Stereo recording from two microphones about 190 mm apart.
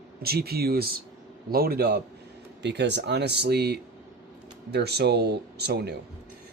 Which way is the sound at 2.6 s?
65° right (ahead or behind).